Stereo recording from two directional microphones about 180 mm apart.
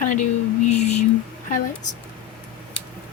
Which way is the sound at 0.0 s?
45° left (ahead or behind).